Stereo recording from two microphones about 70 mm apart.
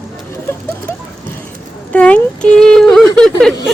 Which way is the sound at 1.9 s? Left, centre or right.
Centre.